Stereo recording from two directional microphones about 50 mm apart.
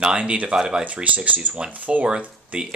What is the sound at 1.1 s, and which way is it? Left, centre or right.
Speech, right.